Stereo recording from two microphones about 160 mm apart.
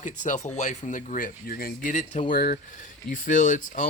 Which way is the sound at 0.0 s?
50° left (ahead or behind).